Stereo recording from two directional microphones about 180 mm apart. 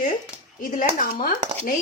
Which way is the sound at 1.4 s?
35° right (ahead or behind).